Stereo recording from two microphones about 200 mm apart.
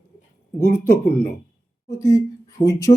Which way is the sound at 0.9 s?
10° left (ahead or behind).